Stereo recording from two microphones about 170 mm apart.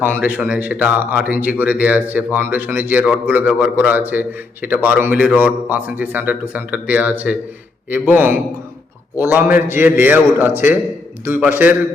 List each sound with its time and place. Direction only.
0.0 s speech: 10° right (ahead or behind)